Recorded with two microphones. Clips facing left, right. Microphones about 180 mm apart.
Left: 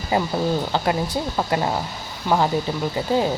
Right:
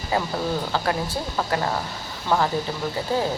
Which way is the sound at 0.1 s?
20° left (ahead or behind).